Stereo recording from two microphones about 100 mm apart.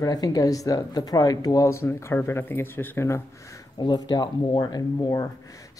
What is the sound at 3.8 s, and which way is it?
Speech, 45° left (ahead or behind).